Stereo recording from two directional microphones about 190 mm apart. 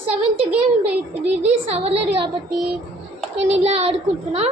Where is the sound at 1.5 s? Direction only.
30° right (ahead or behind).